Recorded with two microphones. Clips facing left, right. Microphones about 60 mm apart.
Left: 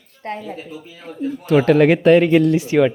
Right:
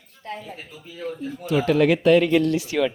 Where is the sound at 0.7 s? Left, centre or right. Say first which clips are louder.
Right 2 dB; centre.